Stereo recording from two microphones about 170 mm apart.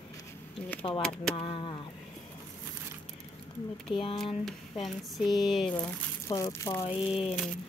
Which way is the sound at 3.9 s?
30° left (ahead or behind).